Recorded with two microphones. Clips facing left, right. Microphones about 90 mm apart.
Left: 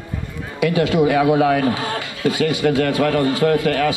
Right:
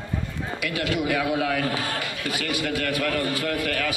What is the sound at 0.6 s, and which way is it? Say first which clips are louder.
A man's voice: left 11 dB; 25° left (ahead or behind).